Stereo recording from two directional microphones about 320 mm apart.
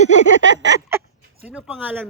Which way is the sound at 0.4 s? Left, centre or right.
Right.